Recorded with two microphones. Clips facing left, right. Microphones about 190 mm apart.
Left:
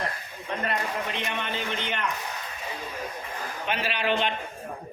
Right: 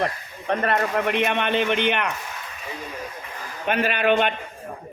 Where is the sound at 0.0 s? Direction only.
65° right (ahead or behind).